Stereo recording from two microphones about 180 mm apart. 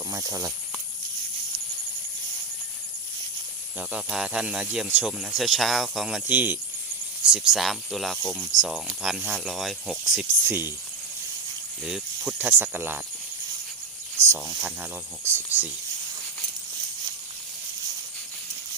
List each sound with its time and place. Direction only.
0.1 s speech: 20° right (ahead or behind)
3.8 s speech: 5° right (ahead or behind)
11.9 s speech: 5° right (ahead or behind)
14.3 s speech: 15° right (ahead or behind)